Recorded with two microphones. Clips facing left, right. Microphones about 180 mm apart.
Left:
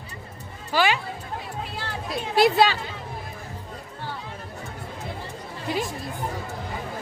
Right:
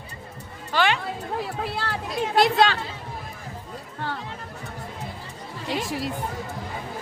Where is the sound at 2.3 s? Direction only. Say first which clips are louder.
Left 1 dB; 5° left (ahead or behind).